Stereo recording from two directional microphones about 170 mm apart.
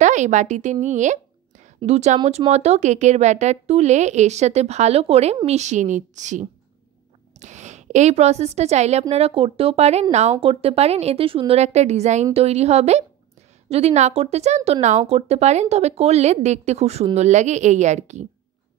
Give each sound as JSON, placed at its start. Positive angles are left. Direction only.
{"t": 0.0, "sound": "a woman's voice", "side_deg": -45}